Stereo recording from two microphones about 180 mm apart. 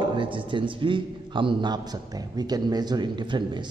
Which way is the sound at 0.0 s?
25° right (ahead or behind).